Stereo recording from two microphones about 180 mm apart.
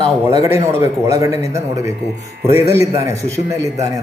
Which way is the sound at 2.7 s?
15° right (ahead or behind).